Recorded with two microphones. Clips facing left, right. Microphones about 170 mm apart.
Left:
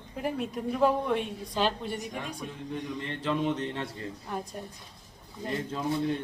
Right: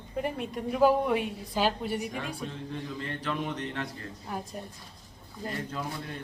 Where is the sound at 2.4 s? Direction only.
20° left (ahead or behind).